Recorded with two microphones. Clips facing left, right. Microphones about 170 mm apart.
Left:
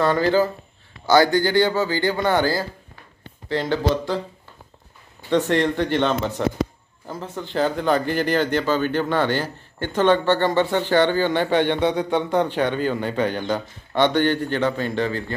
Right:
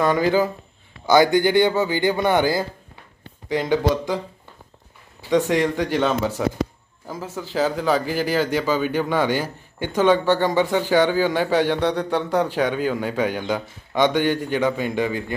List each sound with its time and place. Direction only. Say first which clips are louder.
0.0 s speech: even; 15° right (ahead or behind)
5.3 s speech: even; 10° right (ahead or behind)